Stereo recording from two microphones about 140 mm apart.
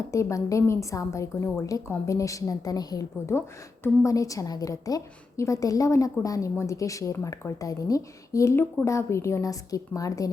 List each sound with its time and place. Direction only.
0.1 s a woman's voice: 20° left (ahead or behind)